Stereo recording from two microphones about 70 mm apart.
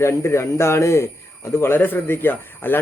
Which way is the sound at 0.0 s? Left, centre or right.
Left.